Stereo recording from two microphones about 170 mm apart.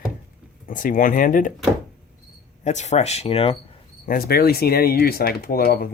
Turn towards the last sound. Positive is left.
turn(degrees=60)  # may be behind; listen again after turning